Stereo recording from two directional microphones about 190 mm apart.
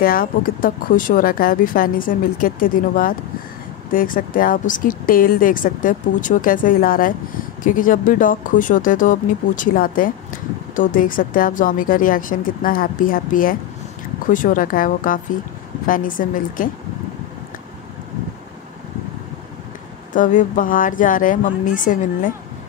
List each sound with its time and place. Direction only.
0.0 s speech: 50° left (ahead or behind)
20.2 s speech: 45° left (ahead or behind)